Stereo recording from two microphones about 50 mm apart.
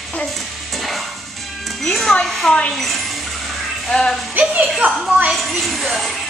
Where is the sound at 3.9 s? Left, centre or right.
Centre.